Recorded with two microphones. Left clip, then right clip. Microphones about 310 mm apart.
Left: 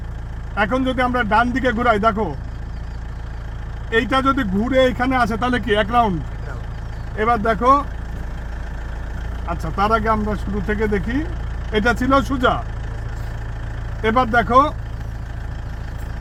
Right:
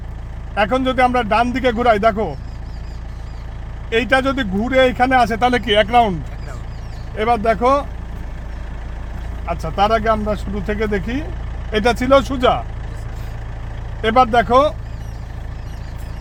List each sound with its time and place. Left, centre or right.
0.5 s speech: centre
3.9 s speech: centre
7.2 s speech: centre
9.5 s speech: centre
14.0 s speech: centre